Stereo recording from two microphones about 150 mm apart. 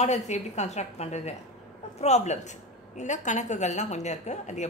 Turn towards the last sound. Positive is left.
turn(degrees=50)  # may be behind; listen again after turning